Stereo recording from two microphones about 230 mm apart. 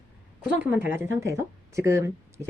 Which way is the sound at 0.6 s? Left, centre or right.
Centre.